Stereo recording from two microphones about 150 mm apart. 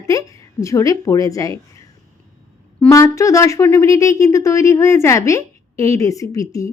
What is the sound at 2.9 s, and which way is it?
Speech, 20° left (ahead or behind).